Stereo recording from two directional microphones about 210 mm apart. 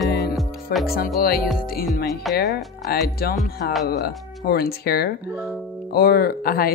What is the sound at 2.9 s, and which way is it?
Speech, 45° left (ahead or behind).